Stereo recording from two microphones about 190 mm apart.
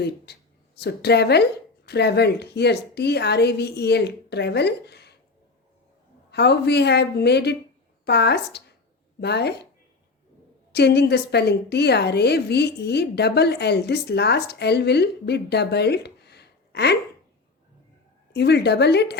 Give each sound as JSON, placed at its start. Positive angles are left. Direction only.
{"t": 0.3, "sound": "a woman's voice", "side_deg": 55}
{"t": 6.3, "sound": "a woman's voice", "side_deg": 60}
{"t": 10.7, "sound": "a woman's voice", "side_deg": 60}
{"t": 18.3, "sound": "a woman's voice", "side_deg": 60}